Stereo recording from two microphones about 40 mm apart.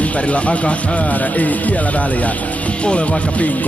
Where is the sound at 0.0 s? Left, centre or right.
Left.